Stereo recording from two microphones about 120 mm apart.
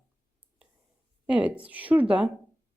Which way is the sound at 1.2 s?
10° right (ahead or behind).